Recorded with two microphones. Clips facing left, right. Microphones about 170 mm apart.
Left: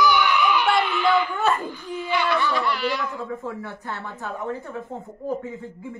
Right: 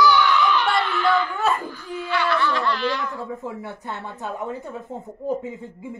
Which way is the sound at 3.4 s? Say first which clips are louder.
Even; 20° right (ahead or behind).